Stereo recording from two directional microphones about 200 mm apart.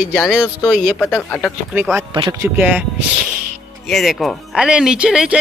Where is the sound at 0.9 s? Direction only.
5° left (ahead or behind).